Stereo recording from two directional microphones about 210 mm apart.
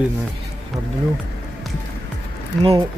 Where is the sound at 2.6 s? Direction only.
25° right (ahead or behind).